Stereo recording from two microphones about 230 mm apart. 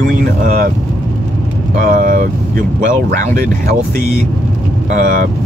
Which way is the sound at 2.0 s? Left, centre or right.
Right.